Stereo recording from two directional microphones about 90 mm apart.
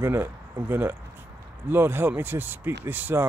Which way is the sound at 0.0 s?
30° right (ahead or behind).